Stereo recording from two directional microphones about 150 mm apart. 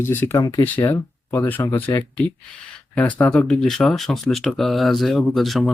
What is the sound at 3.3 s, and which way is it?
Speech, 5° left (ahead or behind).